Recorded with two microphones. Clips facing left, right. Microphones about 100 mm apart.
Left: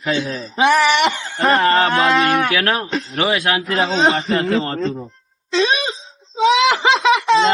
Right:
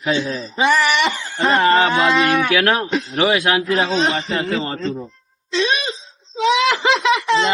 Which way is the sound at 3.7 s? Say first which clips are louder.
Left 5 dB; 30° left (ahead or behind).